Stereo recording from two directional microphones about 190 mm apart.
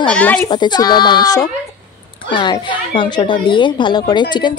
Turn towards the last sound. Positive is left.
turn(degrees=25)  # may be behind; listen again after turning